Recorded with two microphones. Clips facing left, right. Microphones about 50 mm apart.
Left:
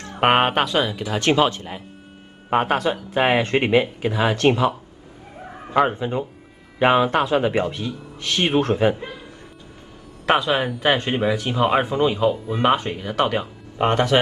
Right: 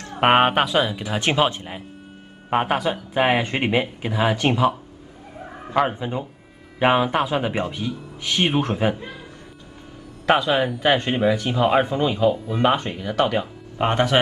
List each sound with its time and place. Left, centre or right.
0.2 s speech: centre
2.5 s speech: centre
5.8 s speech: centre
8.2 s speech: centre
10.2 s speech: centre
13.8 s speech: centre